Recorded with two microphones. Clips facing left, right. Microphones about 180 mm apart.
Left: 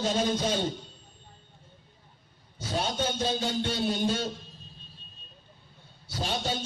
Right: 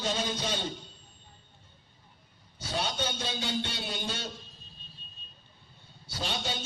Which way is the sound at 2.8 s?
45° left (ahead or behind).